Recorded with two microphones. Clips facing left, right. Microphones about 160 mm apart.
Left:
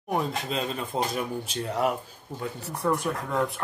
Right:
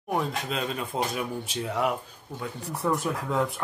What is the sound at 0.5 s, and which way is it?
Speech, centre (ahead or behind).